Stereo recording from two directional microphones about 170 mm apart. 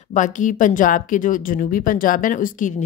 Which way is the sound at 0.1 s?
50° left (ahead or behind).